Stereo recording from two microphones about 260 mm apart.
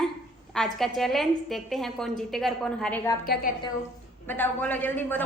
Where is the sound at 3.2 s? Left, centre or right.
Left.